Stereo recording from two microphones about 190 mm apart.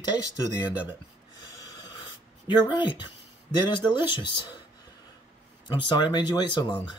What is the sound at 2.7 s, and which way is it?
Speech, 25° left (ahead or behind).